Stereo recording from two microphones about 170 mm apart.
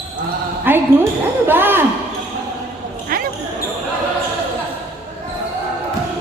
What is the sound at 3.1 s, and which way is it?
Basketball bounce, 55° right (ahead or behind).